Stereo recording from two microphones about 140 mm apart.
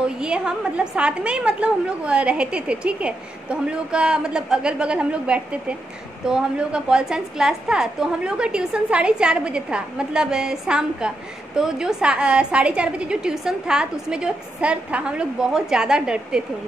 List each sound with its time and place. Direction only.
0.0 s a woman's voice: 5° right (ahead or behind)